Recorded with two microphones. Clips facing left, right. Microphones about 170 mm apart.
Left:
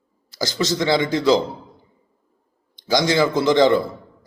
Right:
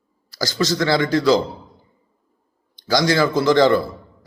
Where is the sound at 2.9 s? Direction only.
20° left (ahead or behind).